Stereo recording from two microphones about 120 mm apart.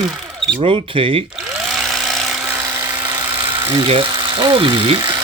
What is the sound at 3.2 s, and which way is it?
Electric toothbrush, 40° right (ahead or behind).